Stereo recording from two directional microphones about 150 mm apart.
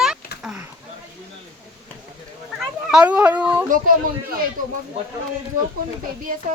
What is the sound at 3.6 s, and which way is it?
Speech, 65° right (ahead or behind).